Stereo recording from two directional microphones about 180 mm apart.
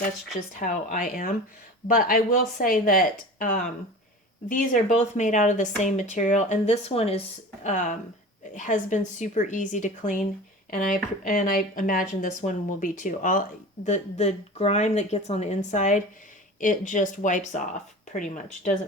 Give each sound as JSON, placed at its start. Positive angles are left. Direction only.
{"t": 0.3, "sound": "speech", "side_deg": 45}